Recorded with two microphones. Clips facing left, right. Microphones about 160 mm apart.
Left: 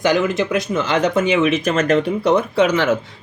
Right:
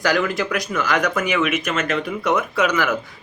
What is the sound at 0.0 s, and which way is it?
Speech, 20° left (ahead or behind).